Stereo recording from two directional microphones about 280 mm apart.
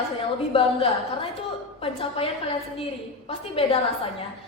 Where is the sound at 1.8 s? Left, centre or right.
Centre.